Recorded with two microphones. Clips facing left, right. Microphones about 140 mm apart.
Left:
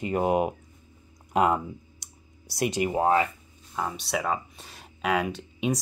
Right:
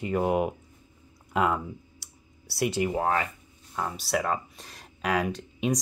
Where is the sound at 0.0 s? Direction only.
20° left (ahead or behind).